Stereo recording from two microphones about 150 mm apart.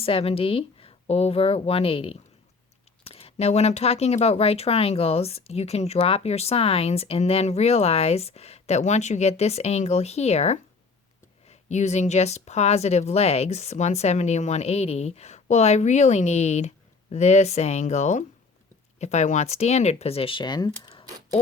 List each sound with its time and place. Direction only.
0.0 s speech: 40° left (ahead or behind)